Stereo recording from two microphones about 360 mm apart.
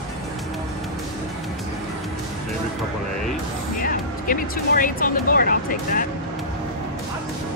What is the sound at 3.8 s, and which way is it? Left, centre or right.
Speech, left.